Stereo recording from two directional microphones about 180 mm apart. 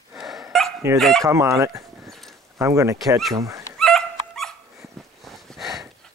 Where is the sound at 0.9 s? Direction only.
Centre (ahead or behind).